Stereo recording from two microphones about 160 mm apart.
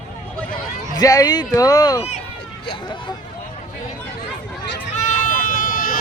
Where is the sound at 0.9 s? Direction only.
25° left (ahead or behind).